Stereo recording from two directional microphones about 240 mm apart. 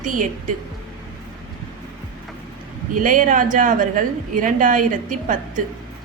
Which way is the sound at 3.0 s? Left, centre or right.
Right.